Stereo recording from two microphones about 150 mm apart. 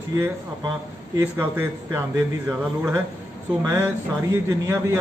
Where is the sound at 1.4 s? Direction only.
15° right (ahead or behind).